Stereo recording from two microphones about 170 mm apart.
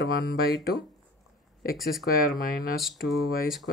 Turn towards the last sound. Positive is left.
turn(degrees=0)  # may be behind; listen again after turning